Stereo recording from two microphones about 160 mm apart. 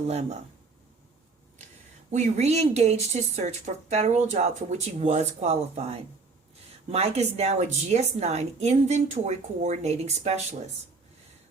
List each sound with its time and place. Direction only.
0.1 s speech: 45° right (ahead or behind)
2.0 s speech: 45° right (ahead or behind)